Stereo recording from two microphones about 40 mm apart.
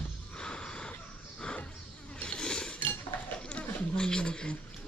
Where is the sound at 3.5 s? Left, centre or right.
Left.